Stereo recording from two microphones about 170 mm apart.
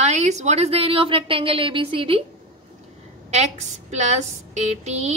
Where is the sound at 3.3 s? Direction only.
40° right (ahead or behind).